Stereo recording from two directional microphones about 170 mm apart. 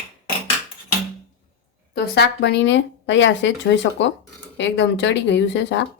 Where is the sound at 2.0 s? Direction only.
75° left (ahead or behind).